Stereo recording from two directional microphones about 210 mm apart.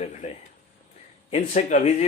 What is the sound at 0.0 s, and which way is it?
Speech, 30° left (ahead or behind).